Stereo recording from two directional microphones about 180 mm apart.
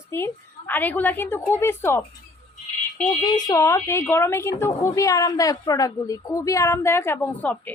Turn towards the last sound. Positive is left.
turn(degrees=10)  # may be behind; listen again after turning